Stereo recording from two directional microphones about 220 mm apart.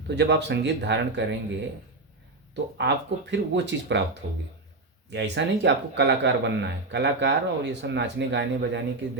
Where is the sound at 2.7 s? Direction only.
50° right (ahead or behind).